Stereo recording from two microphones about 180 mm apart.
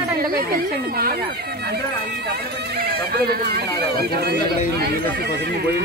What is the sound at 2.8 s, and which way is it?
Speech, 60° right (ahead or behind).